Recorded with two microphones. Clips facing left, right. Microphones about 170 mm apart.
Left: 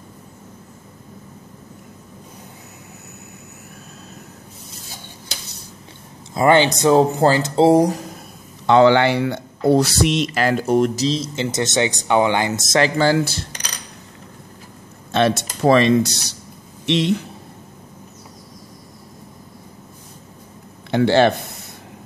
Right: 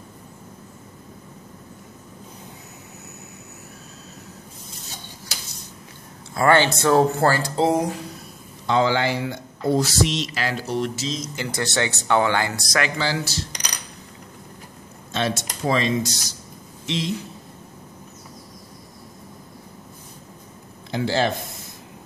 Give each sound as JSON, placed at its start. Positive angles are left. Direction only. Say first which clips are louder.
{"t": 6.3, "sound": "speech", "louder": "left 3 dB", "side_deg": 20}
{"t": 8.6, "sound": "speech", "louder": "left 7 dB", "side_deg": 65}
{"t": 12.9, "sound": "speech", "louder": "left 8 dB", "side_deg": 50}
{"t": 15.1, "sound": "speech", "louder": "left 7 dB", "side_deg": 65}
{"t": 20.9, "sound": "speech", "louder": "left 8 dB", "side_deg": 65}